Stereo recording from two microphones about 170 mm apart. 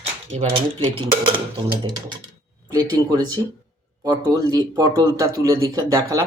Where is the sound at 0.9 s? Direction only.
30° right (ahead or behind).